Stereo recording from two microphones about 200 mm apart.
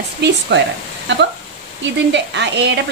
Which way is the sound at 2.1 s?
60° right (ahead or behind).